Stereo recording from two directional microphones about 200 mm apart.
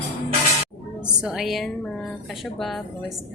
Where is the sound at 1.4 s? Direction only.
Centre (ahead or behind).